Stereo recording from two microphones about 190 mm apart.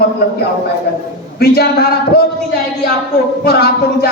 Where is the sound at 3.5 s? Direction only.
55° left (ahead or behind).